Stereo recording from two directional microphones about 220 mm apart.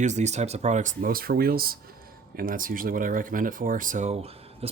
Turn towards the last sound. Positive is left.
turn(degrees=-25)  # may be behind; listen again after turning